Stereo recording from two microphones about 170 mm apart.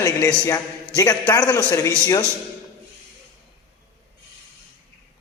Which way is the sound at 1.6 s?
20° left (ahead or behind).